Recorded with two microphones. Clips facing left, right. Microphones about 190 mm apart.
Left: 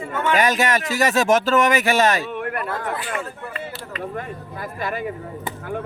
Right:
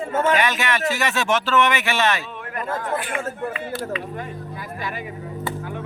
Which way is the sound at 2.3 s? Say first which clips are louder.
Left 5 dB; 60° left (ahead or behind).